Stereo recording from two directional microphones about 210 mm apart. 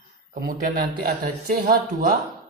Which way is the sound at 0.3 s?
45° right (ahead or behind).